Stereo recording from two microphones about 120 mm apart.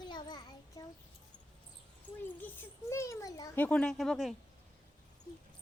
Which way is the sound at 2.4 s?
20° left (ahead or behind).